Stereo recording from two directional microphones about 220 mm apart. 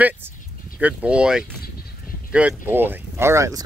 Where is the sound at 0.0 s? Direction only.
10° right (ahead or behind).